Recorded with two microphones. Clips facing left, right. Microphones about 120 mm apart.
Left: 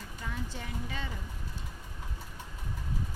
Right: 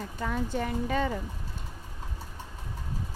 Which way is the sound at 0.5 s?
50° right (ahead or behind).